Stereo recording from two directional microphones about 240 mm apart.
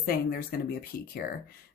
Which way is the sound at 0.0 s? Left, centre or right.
Left.